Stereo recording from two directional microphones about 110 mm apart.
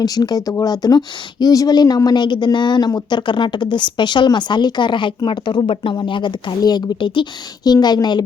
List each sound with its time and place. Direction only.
0.0 s a woman's voice: 35° left (ahead or behind)